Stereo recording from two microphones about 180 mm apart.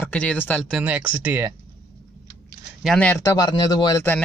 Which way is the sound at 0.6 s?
5° right (ahead or behind).